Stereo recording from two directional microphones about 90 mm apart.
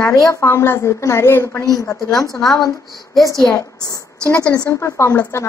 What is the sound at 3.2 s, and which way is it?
Speech, 40° left (ahead or behind).